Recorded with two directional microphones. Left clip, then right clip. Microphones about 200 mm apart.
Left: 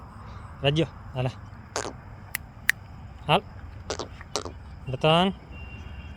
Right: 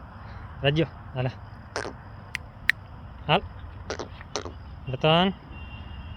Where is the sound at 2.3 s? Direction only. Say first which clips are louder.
Even; 35° left (ahead or behind).